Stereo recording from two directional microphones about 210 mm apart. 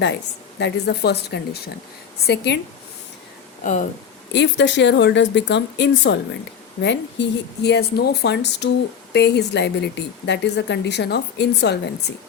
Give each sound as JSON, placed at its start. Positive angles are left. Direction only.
{"t": 0.6, "sound": "a woman's voice", "side_deg": 55}
{"t": 3.6, "sound": "speech", "side_deg": 35}
{"t": 4.3, "sound": "a woman's voice", "side_deg": 55}